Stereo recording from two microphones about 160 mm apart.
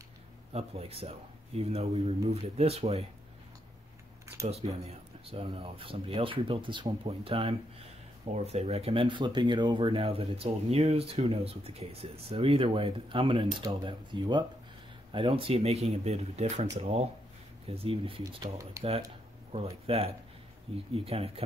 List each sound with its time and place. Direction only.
0.5 s speech: 40° right (ahead or behind)
4.8 s speech: 35° right (ahead or behind)
18.6 s speech: 20° right (ahead or behind)
19.5 s speech: 40° right (ahead or behind)